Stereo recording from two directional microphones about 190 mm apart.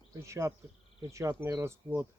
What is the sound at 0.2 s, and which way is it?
Speech, 15° right (ahead or behind).